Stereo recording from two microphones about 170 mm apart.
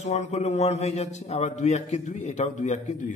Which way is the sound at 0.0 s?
40° left (ahead or behind).